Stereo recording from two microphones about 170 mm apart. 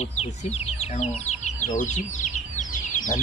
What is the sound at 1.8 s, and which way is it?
Chicken, 45° left (ahead or behind).